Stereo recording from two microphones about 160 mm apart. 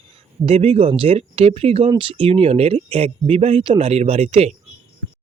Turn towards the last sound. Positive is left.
turn(degrees=-40)  # may be behind; listen again after turning